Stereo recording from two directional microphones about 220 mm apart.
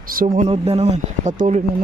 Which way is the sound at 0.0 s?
40° right (ahead or behind).